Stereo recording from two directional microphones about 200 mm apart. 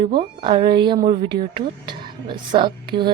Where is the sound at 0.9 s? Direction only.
25° right (ahead or behind).